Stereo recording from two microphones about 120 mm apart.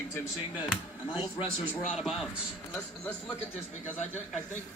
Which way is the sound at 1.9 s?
Centre (ahead or behind).